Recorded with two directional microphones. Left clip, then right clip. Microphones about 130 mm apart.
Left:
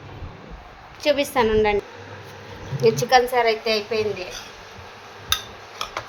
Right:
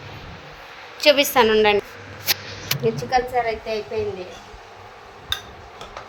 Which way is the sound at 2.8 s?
40° left (ahead or behind).